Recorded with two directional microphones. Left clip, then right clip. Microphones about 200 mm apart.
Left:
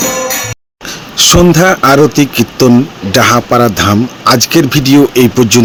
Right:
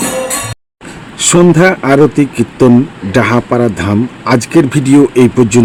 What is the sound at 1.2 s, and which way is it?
A man's voice, 5° left (ahead or behind).